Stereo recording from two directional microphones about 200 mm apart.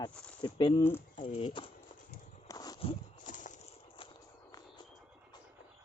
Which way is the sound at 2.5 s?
20° left (ahead or behind).